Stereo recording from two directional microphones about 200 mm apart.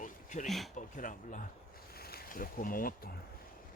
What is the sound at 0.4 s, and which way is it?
Speech, centre (ahead or behind).